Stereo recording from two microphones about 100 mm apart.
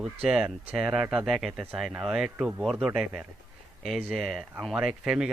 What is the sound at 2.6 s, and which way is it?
Speech, centre (ahead or behind).